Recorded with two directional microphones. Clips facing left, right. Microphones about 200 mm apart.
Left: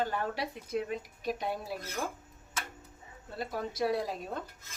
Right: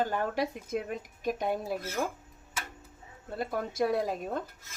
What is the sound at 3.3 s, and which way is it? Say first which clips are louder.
Speech: right 4 dB; 50° right (ahead or behind).